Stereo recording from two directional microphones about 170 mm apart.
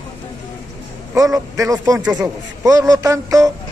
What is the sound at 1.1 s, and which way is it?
Speech, 20° right (ahead or behind).